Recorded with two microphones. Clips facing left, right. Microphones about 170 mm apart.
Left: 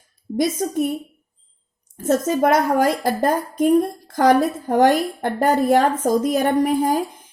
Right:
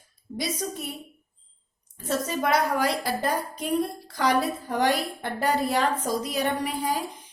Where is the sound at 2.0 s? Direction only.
50° left (ahead or behind).